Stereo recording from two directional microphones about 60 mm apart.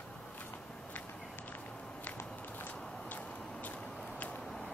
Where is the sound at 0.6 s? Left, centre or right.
Centre.